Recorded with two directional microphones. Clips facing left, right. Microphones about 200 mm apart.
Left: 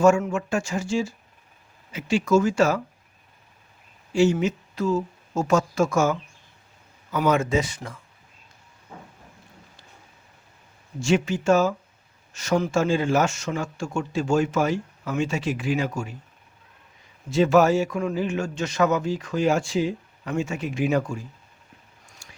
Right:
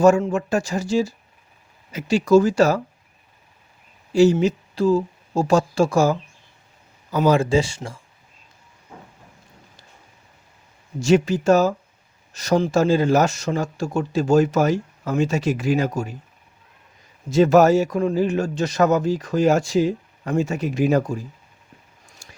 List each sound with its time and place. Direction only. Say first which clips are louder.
0.0 s speech: right 3 dB; 35° right (ahead or behind)
4.1 s speech: right 5 dB; 35° right (ahead or behind)
11.0 s speech: right 5 dB; 40° right (ahead or behind)
17.2 s speech: right 4 dB; 40° right (ahead or behind)
22.2 s whispering: right 3 dB; 40° right (ahead or behind)